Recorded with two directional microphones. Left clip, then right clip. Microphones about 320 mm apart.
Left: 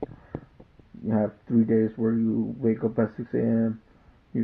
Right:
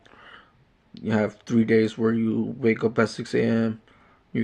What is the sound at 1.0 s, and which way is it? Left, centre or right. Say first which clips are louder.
Speech: right 2 dB; right.